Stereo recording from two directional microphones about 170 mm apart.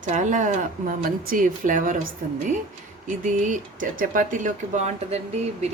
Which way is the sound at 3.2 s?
50° right (ahead or behind).